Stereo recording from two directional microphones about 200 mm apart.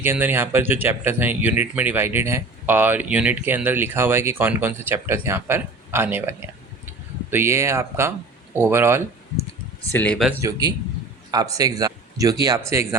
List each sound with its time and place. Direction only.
0.0 s speech: 10° right (ahead or behind)
9.9 s speech: 10° left (ahead or behind)
10.4 s a man's voice: 20° right (ahead or behind)